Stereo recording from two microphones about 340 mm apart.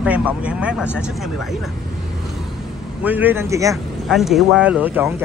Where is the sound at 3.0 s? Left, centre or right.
Centre.